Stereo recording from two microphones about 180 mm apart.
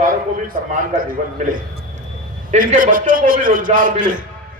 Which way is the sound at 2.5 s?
45° right (ahead or behind).